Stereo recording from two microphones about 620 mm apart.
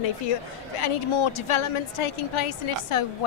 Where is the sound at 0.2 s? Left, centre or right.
Left.